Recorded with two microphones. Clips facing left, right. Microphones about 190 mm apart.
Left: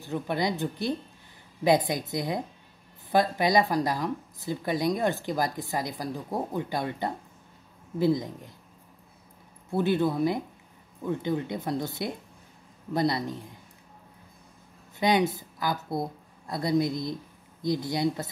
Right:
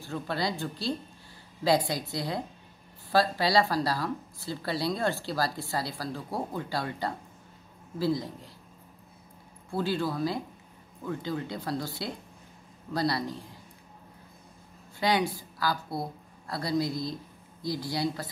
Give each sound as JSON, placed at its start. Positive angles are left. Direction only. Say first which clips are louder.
{"t": 0.0, "sound": "speech", "louder": "left 3 dB", "side_deg": 20}
{"t": 9.7, "sound": "speech", "louder": "left 5 dB", "side_deg": 20}
{"t": 15.0, "sound": "a woman's voice", "louder": "left 3 dB", "side_deg": 20}